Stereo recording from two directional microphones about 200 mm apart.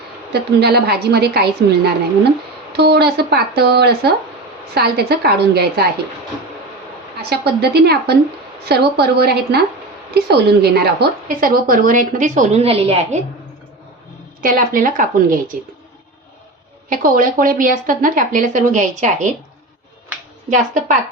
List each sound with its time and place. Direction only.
0.3 s speech: 55° right (ahead or behind)
7.2 s a woman's voice: 55° right (ahead or behind); by 13.2 s 30° right (ahead or behind)
14.4 s speech: 45° right (ahead or behind)
16.9 s speech: 45° right (ahead or behind)